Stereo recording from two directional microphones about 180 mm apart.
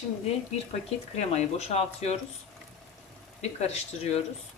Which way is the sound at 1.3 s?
35° left (ahead or behind).